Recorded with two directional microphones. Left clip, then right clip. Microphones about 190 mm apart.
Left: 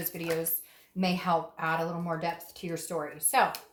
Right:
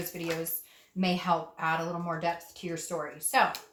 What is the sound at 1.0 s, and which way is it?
Speech, 30° left (ahead or behind).